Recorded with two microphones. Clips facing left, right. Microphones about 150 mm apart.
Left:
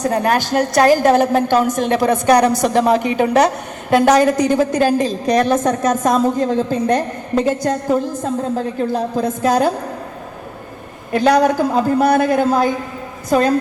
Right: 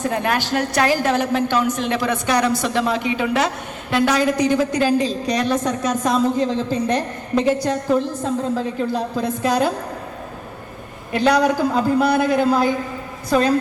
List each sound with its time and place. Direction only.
0.0 s a woman's voice: 40° left (ahead or behind)
11.1 s a woman's voice: 45° left (ahead or behind)